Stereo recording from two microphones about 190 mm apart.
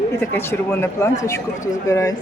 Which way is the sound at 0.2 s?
10° left (ahead or behind).